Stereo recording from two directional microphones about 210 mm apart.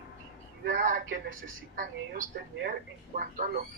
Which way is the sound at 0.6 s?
40° right (ahead or behind).